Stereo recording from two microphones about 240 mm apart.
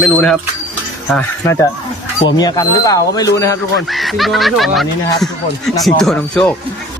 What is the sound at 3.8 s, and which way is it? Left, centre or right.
Speech, centre.